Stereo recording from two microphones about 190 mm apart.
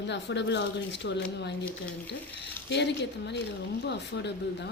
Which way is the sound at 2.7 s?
65° left (ahead or behind).